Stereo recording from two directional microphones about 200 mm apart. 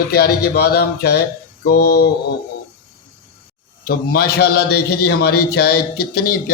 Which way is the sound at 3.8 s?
50° left (ahead or behind).